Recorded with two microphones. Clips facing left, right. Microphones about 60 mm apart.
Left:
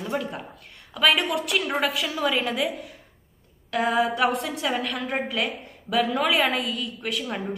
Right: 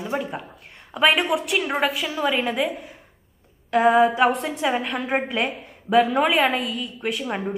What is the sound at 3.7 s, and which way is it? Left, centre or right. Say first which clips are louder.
Speech: right 6 dB; centre.